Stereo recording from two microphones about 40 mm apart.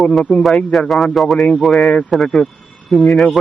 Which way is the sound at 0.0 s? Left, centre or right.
Centre.